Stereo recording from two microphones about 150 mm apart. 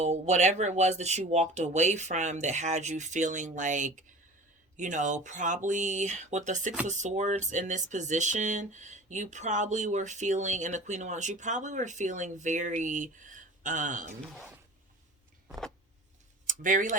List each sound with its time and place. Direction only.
0.0 s speech: 50° right (ahead or behind)
15.4 s a sound: centre (ahead or behind)
16.5 s speech: 60° right (ahead or behind)